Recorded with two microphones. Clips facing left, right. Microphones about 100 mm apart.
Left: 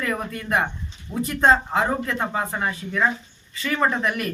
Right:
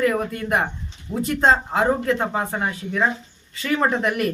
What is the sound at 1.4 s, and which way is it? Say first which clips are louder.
Speech: even; 25° right (ahead or behind).